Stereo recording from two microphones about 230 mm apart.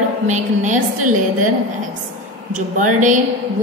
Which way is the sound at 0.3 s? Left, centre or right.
Right.